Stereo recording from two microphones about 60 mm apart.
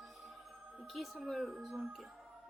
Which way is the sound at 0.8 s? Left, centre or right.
Centre.